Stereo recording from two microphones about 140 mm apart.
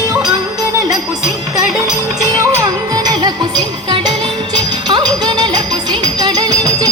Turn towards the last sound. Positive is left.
turn(degrees=-30)  # may be behind; listen again after turning